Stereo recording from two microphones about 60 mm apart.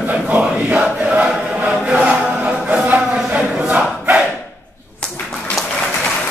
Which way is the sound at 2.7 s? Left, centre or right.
Right.